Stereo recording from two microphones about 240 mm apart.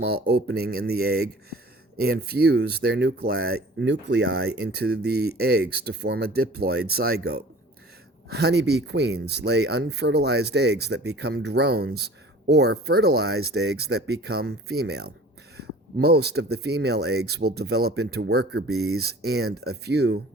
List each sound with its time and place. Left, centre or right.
0.0 s speech: right